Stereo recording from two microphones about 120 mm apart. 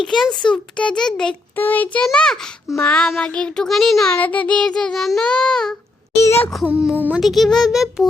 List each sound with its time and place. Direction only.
0.0 s a child's voice: centre (ahead or behind)
0.5 s child singing: 5° left (ahead or behind)
2.0 s a child's voice: 5° left (ahead or behind)
2.7 s child singing: 10° left (ahead or behind)
6.1 s a child's voice: 20° left (ahead or behind)
6.7 s speech: 10° right (ahead or behind)
7.2 s a child's voice: centre (ahead or behind)